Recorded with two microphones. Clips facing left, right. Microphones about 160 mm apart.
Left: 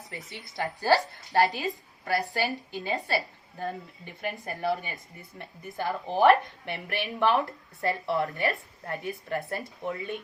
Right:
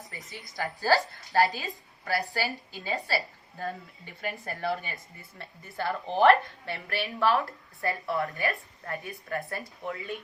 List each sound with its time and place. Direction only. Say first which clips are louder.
0.5 s a woman's voice: left 1 dB; 20° left (ahead or behind)
4.2 s a woman's voice: left 1 dB; 20° left (ahead or behind)